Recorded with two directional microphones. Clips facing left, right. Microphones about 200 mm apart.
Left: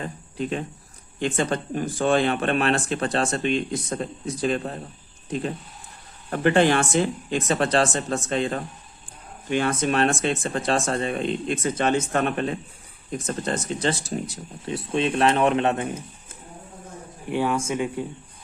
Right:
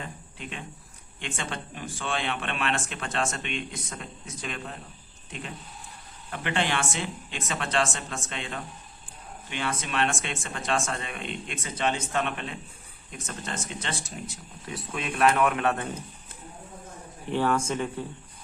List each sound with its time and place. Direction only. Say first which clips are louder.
0.0 s a sound: left 10 dB; 40° left (ahead or behind)
1.2 s speech: left 11 dB; 40° left (ahead or behind); by 16.0 s 20° left (ahead or behind)
17.2 s speech: left 2 dB; 10° left (ahead or behind)